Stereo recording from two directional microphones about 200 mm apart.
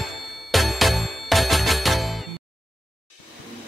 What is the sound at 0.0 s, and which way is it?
Music, centre (ahead or behind).